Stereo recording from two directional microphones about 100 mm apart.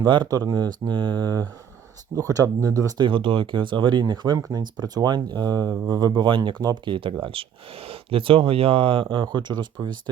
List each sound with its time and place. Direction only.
0.0 s speech: 50° right (ahead or behind)
3.0 s speech: 55° right (ahead or behind)
4.4 s speech: 35° right (ahead or behind); by 6.6 s 55° right (ahead or behind)
6.6 s speech: 40° right (ahead or behind)
6.9 s speech: 60° right (ahead or behind)